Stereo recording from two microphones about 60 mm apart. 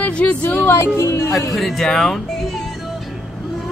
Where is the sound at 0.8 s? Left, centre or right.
Left.